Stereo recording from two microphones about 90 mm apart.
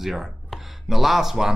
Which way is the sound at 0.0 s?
5° right (ahead or behind).